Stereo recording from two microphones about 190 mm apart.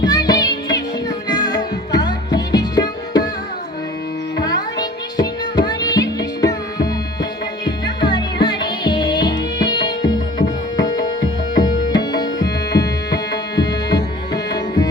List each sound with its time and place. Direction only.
0.0 s music: 20° left (ahead or behind)
4.4 s music: 20° left (ahead or behind)
11.5 s tabla: 20° left (ahead or behind)